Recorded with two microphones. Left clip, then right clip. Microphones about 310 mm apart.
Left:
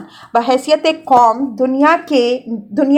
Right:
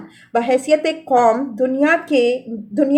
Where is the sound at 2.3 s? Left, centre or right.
Left.